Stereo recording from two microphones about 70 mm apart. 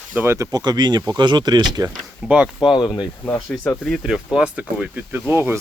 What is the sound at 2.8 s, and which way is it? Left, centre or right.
Speech, left.